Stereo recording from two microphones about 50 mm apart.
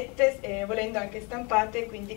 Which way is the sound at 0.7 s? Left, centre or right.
Centre.